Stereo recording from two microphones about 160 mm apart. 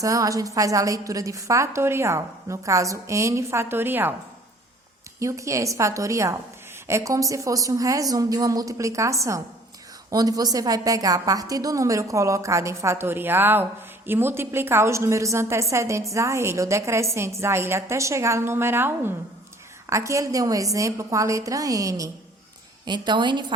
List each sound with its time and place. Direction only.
0.0 s a woman's voice: 20° right (ahead or behind)
5.2 s a woman's voice: 20° right (ahead or behind)